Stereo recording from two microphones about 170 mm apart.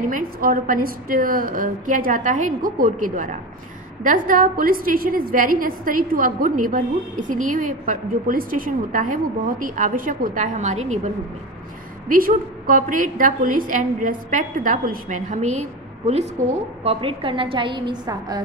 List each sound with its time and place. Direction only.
0.1 s a woman's voice: 55° right (ahead or behind)
12.1 s a woman's voice: 55° right (ahead or behind)
16.8 s a woman's voice: 30° right (ahead or behind)